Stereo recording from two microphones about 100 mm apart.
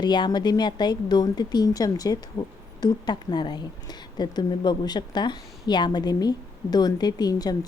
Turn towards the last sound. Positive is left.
turn(degrees=40)  # may be behind; listen again after turning